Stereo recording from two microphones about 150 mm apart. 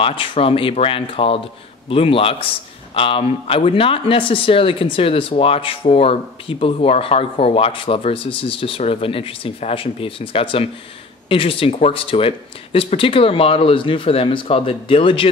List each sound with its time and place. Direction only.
0.0 s speech: 35° left (ahead or behind)